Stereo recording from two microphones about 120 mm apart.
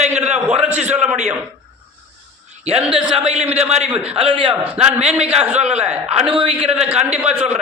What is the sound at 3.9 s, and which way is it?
A man's voice, 10° right (ahead or behind).